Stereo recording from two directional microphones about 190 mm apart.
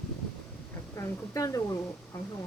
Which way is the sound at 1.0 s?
15° left (ahead or behind).